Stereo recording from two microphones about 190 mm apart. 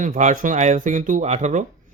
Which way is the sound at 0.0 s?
40° right (ahead or behind).